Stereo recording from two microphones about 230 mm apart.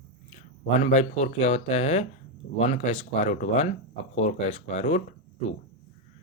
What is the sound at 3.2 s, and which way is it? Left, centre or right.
Speech, left.